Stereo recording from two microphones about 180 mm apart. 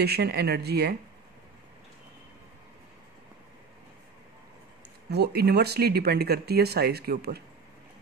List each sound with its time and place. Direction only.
0.0 s speech: 60° right (ahead or behind)
5.1 s speech: 65° right (ahead or behind)